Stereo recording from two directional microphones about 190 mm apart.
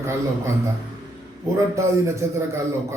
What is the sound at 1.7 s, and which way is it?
A man's voice, 15° right (ahead or behind).